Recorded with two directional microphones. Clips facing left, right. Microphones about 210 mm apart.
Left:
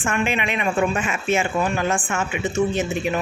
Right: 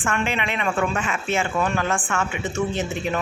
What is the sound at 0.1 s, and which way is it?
Speech, 15° left (ahead or behind).